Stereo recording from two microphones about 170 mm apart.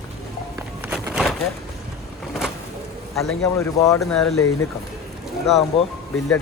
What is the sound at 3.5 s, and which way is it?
Speech, 15° left (ahead or behind).